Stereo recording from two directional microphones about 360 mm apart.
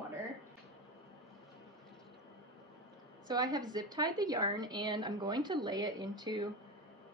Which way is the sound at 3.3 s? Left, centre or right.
Centre.